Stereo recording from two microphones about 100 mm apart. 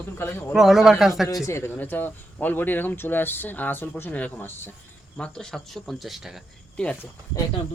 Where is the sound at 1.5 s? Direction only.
25° left (ahead or behind); by 6.4 s centre (ahead or behind).